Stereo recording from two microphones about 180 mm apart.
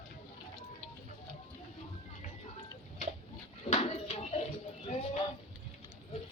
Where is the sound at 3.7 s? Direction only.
35° left (ahead or behind).